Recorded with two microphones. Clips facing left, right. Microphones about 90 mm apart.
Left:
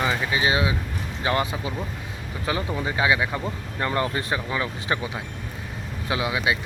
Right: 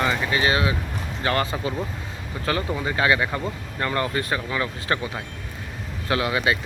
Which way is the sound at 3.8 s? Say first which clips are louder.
Even; 20° left (ahead or behind).